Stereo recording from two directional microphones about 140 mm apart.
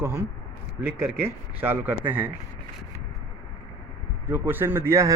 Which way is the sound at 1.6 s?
15° right (ahead or behind).